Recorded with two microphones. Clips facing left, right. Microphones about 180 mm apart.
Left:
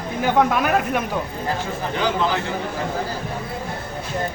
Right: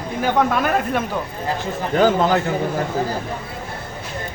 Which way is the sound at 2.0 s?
45° right (ahead or behind).